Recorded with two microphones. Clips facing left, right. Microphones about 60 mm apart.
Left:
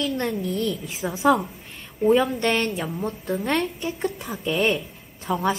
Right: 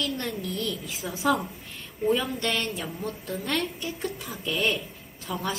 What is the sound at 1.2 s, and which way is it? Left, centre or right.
Speech, centre.